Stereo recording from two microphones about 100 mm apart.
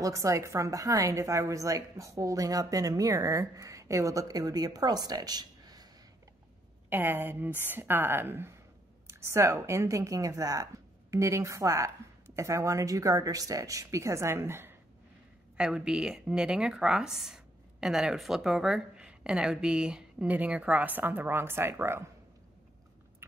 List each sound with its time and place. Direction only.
0.0 s a woman's voice: 35° right (ahead or behind)
6.9 s a woman's voice: 20° right (ahead or behind)
15.5 s speech: 10° right (ahead or behind)